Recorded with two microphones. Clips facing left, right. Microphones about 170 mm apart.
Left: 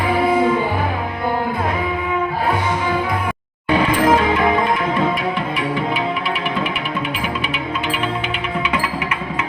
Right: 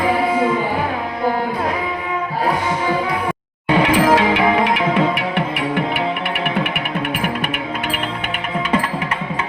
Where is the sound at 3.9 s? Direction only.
80° right; by 8.4 s 55° right (ahead or behind).